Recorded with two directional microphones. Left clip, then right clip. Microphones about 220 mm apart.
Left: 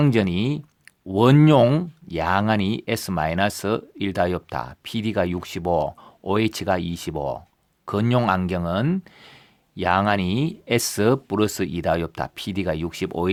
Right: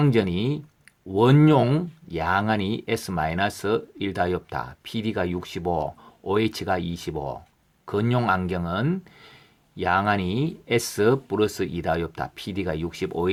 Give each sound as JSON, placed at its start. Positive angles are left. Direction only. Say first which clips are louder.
{"t": 0.0, "sound": "speech", "louder": "left 1 dB", "side_deg": 45}